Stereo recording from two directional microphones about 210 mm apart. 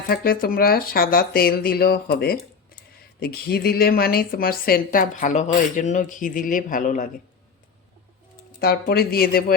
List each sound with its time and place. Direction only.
0.1 s speech: 45° left (ahead or behind)
8.6 s speech: 45° left (ahead or behind)